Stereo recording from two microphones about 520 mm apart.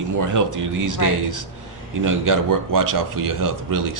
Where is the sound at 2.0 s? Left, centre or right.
Right.